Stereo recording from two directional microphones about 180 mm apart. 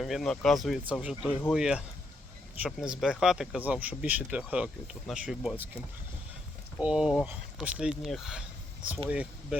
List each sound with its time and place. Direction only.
0.0 s speech: centre (ahead or behind)
6.7 s speech: 5° right (ahead or behind)